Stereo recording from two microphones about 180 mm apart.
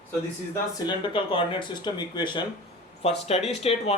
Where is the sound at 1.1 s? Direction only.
30° left (ahead or behind).